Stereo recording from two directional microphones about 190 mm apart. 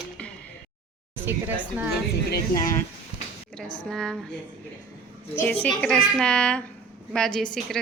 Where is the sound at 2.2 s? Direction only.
55° left (ahead or behind).